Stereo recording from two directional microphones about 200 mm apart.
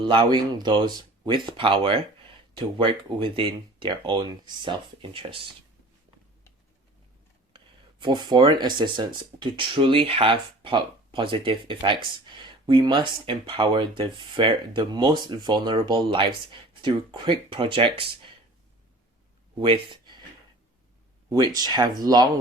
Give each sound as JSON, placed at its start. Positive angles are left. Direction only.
{"t": 0.0, "sound": "speech", "side_deg": -25}
{"t": 7.5, "sound": "speech", "side_deg": -25}
{"t": 19.5, "sound": "speech", "side_deg": -25}
{"t": 19.9, "sound": "a sound", "side_deg": -20}
{"t": 21.2, "sound": "speech", "side_deg": -20}